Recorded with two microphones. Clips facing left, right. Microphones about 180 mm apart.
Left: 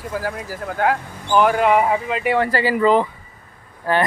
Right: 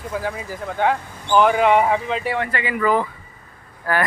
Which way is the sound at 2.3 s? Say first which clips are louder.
Left 5 dB; 35° left (ahead or behind).